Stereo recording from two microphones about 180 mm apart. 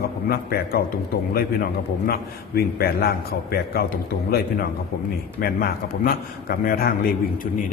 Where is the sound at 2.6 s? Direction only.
60° left (ahead or behind).